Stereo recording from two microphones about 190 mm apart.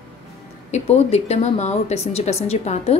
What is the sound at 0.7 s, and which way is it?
Speech, 35° left (ahead or behind).